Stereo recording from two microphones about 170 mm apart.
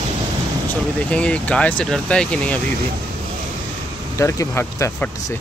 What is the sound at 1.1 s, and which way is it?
Speech, 5° left (ahead or behind).